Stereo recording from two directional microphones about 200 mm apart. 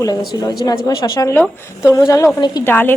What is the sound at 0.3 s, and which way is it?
A woman's voice, 15° left (ahead or behind).